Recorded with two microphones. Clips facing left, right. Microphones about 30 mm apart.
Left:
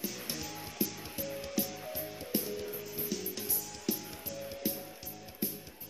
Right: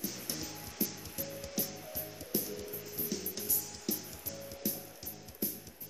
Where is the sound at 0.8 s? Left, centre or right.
Left.